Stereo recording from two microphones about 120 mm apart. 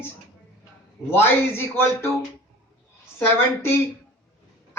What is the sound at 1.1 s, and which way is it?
Speech, 20° left (ahead or behind).